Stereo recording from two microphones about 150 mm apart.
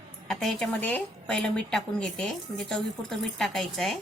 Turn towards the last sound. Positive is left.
turn(degrees=0)  # may be behind; listen again after turning